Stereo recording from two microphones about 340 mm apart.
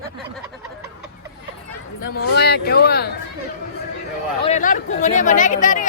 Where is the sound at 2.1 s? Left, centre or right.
Left.